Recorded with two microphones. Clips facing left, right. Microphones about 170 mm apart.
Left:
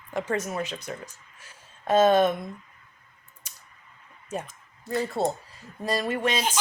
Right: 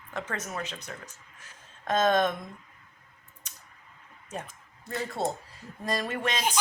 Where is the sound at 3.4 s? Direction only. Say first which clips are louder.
Even; 10° left (ahead or behind).